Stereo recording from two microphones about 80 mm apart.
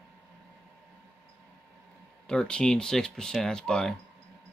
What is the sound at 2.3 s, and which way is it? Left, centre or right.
Speech, centre.